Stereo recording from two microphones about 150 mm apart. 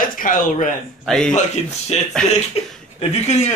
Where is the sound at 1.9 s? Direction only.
45° left (ahead or behind).